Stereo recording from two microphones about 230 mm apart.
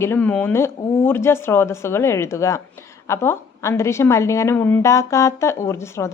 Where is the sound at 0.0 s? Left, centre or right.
Centre.